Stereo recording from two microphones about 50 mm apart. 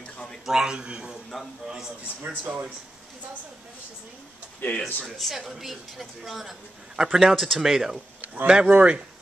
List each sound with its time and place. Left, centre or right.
0.5 s a man's voice: centre
1.3 s a woman's voice: centre
2.2 s speech: right
4.6 s a man's voice: left
5.0 s a woman's voice: centre
8.5 s speech: right